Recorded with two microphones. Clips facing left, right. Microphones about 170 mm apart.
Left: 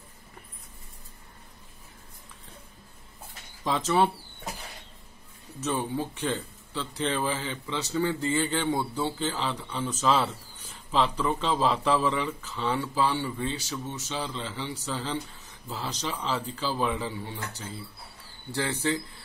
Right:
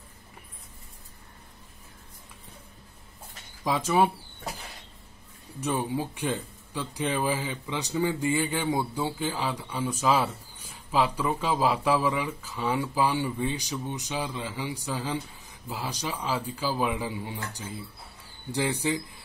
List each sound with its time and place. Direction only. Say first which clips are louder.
3.6 s speech: right 1 dB; 10° right (ahead or behind)
5.6 s speech: right 1 dB; 10° right (ahead or behind)